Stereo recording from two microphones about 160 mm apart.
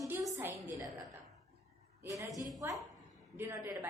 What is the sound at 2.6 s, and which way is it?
A woman's voice, 15° right (ahead or behind).